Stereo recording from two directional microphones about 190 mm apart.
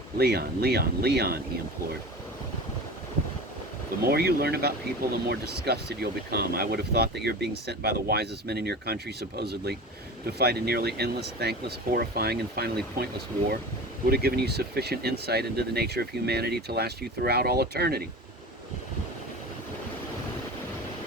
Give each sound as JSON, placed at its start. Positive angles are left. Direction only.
{"t": 0.2, "sound": "speech", "side_deg": -55}
{"t": 4.0, "sound": "speech", "side_deg": -55}